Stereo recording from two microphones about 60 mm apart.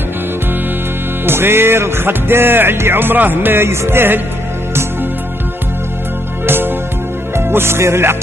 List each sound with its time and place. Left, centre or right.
1.2 s music: right
3.6 s music: right
6.4 s music: right